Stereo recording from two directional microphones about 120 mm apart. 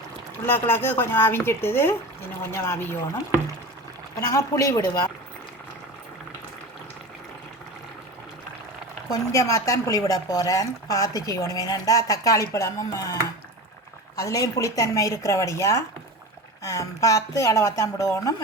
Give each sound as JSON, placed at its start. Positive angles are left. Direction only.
{"t": 0.4, "sound": "speech", "side_deg": 20}
{"t": 4.3, "sound": "speech", "side_deg": 25}
{"t": 9.0, "sound": "speech", "side_deg": 25}
{"t": 14.2, "sound": "speech", "side_deg": 25}